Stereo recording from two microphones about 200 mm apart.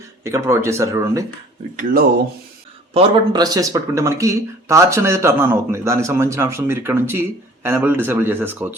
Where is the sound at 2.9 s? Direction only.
25° right (ahead or behind).